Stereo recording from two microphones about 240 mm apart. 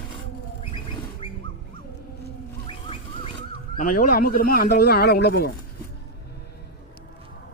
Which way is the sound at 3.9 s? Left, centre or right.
Left.